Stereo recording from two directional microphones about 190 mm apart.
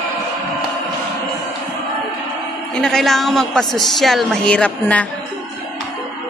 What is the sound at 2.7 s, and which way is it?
A woman's voice, centre (ahead or behind).